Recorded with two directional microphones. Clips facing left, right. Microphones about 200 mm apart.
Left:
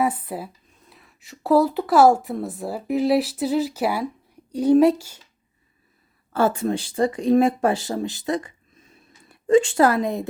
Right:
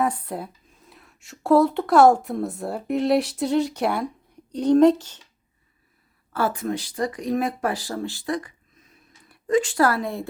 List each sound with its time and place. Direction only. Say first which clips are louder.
0.0 s speech: left 1 dB; 5° left (ahead or behind)
6.3 s speech: left 4 dB; 25° left (ahead or behind)